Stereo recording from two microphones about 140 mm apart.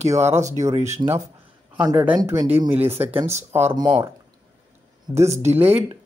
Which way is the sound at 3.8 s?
35° right (ahead or behind).